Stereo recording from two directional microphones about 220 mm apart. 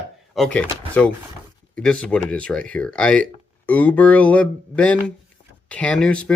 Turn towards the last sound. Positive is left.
turn(degrees=5)  # may be behind; listen again after turning